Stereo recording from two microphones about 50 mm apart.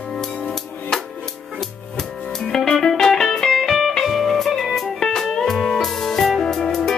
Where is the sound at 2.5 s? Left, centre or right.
Centre.